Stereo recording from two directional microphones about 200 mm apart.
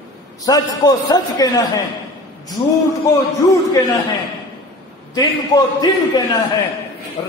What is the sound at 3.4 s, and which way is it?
Speech, 15° left (ahead or behind).